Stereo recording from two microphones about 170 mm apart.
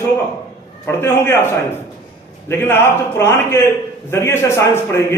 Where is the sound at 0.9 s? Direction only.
15° left (ahead or behind).